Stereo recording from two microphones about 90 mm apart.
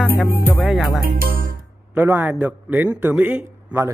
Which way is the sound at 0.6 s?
Centre (ahead or behind).